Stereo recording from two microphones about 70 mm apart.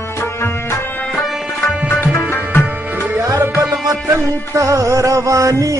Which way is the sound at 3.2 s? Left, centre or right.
Right.